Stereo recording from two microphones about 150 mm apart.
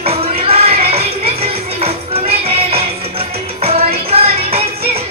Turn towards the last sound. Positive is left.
turn(degrees=-40)  # may be behind; listen again after turning